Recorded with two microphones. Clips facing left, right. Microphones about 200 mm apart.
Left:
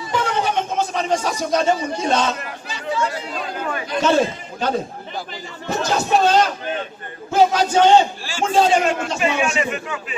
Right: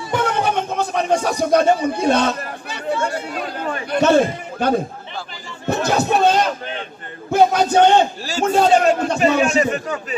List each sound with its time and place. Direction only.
0.1 s music: 60° right (ahead or behind)
3.9 s a man's voice: 60° right (ahead or behind)
8.3 s a man's voice: 40° right (ahead or behind)